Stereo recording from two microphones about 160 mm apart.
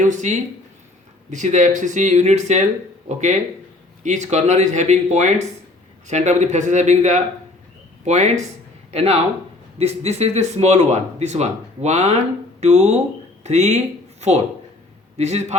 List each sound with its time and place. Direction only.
0.0 s speech: 50° right (ahead or behind)